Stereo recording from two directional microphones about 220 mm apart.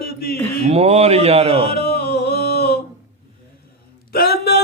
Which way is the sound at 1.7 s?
45° left (ahead or behind).